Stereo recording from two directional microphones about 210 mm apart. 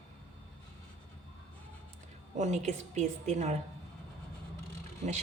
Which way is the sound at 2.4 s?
35° right (ahead or behind).